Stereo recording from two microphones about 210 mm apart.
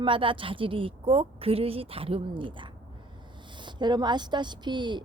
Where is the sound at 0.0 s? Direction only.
25° right (ahead or behind).